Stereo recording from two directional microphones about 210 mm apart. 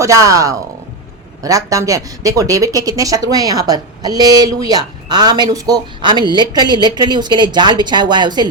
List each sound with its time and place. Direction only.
0.0 s a woman's voice: 15° right (ahead or behind)